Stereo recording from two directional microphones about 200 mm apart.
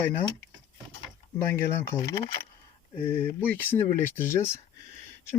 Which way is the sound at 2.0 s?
25° left (ahead or behind).